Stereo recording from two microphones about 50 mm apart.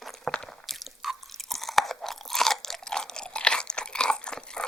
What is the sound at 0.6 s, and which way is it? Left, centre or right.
Crunch, centre.